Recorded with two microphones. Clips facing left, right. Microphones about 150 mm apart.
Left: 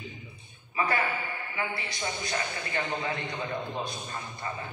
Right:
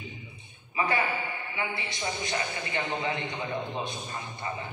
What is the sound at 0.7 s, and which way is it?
A man's voice, 20° right (ahead or behind).